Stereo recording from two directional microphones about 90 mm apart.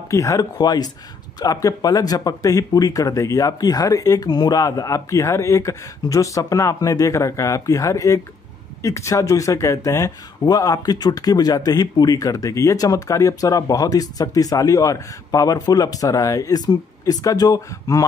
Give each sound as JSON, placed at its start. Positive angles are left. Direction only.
{"t": 0.1, "sound": "speech", "side_deg": 35}
{"t": 0.6, "sound": "speech", "side_deg": 50}